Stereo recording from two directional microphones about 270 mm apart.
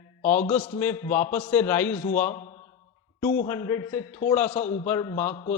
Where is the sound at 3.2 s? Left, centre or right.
Centre.